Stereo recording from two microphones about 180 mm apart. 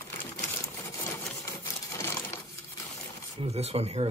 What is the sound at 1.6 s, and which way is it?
Crumpling, 15° left (ahead or behind).